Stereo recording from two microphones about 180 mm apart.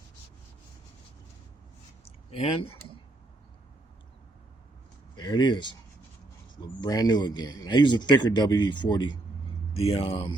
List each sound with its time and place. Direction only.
2.0 s a sound: 30° left (ahead or behind)
5.1 s speech: 25° left (ahead or behind)
6.8 s speech: 20° left (ahead or behind)